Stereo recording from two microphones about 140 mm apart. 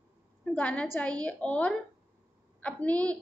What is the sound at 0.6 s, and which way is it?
A woman's voice, 10° left (ahead or behind).